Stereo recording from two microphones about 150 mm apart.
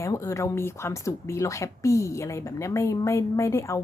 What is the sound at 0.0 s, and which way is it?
Speech, 20° left (ahead or behind).